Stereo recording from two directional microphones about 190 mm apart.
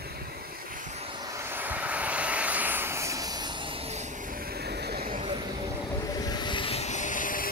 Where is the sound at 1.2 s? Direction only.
15° right (ahead or behind); by 5.3 s 50° right (ahead or behind).